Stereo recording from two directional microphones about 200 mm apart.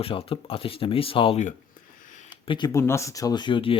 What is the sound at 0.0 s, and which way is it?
Speech, 30° left (ahead or behind).